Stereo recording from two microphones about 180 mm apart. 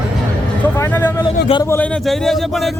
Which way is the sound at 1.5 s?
20° left (ahead or behind).